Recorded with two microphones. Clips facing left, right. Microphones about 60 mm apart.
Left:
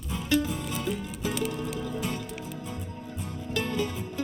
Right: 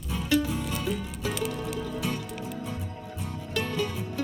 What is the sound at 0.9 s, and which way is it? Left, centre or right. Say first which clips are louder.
Music: even; centre.